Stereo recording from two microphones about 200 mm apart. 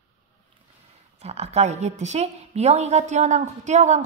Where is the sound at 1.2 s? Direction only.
30° right (ahead or behind).